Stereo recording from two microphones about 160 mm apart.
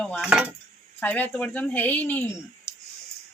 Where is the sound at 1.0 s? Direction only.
10° left (ahead or behind).